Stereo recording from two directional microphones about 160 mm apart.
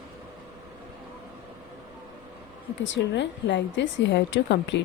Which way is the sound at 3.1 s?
90° left.